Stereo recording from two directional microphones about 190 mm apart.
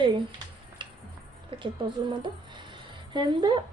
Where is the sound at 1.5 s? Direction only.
25° right (ahead or behind).